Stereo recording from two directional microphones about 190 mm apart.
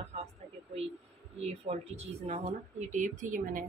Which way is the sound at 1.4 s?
35° right (ahead or behind).